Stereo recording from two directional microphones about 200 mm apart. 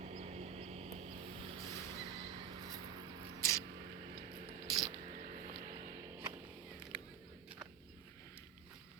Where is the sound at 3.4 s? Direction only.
15° left (ahead or behind).